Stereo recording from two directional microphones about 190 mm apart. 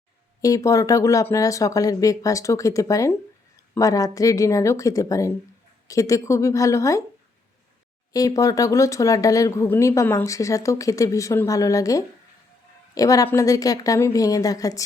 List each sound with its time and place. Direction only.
0.4 s speech: 15° left (ahead or behind)
8.1 s a woman's voice: 20° left (ahead or behind)